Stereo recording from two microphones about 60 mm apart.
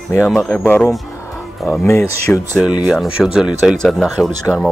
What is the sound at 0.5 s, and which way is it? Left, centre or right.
Speech, left.